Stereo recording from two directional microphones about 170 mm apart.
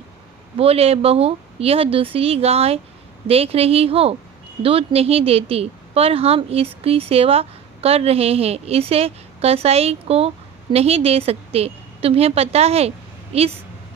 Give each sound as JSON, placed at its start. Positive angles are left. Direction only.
{"t": 0.6, "sound": "a woman's voice", "side_deg": -35}